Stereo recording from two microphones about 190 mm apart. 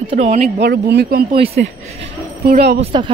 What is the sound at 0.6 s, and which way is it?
Speech, 60° right (ahead or behind).